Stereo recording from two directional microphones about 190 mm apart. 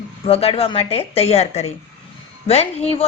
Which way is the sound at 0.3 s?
30° left (ahead or behind).